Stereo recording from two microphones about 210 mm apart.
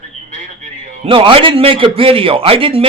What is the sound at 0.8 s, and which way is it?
Music, 35° right (ahead or behind).